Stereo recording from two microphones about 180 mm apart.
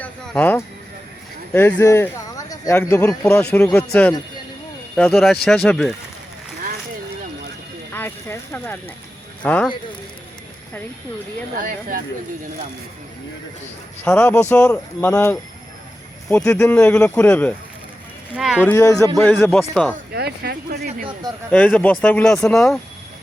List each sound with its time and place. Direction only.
0.0 s a sound: 10° left (ahead or behind)
1.5 s speech: 15° left (ahead or behind)
4.9 s speech: centre (ahead or behind)
7.9 s speech: 10° left (ahead or behind)
11.6 s speech: 55° right (ahead or behind)
14.0 s speech: 10° left (ahead or behind)
18.3 s speech: centre (ahead or behind)
18.6 s speech: 15° left (ahead or behind)
19.4 s speech: 5° left (ahead or behind)
20.1 s speech: 65° right (ahead or behind)
21.5 s speech: 10° left (ahead or behind)